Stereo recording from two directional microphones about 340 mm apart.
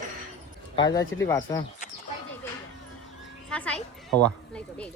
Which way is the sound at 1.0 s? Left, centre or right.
Left.